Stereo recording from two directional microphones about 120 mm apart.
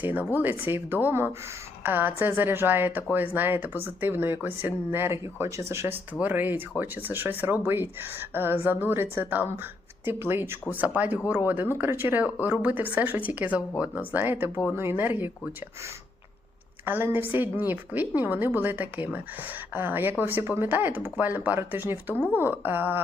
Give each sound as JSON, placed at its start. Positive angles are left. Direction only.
{"t": 0.0, "sound": "a woman's voice", "side_deg": -15}
{"t": 16.8, "sound": "a woman's voice", "side_deg": -20}